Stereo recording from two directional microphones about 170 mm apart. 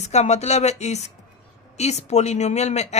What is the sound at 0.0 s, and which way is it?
A woman's voice, 40° left (ahead or behind).